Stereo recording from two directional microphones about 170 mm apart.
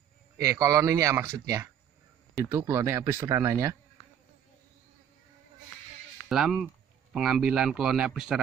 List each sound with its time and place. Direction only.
0.4 s speech: 20° right (ahead or behind)
6.2 s speech: 5° right (ahead or behind)